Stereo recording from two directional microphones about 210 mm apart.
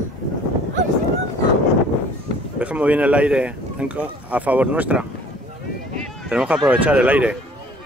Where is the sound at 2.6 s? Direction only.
5° right (ahead or behind).